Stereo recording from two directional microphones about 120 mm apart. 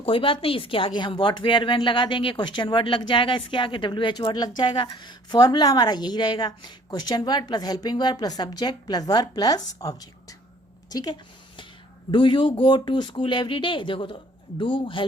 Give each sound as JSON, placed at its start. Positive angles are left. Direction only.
{"t": 0.0, "sound": "a woman's voice", "side_deg": 45}
{"t": 10.8, "sound": "a sound", "side_deg": 35}
{"t": 12.1, "sound": "speech", "side_deg": 45}